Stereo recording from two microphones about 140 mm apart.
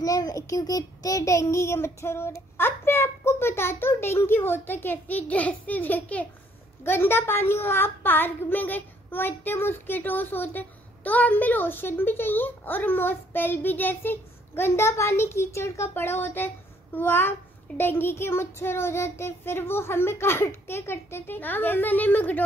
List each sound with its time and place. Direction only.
0.0 s a child's voice: 25° left (ahead or behind)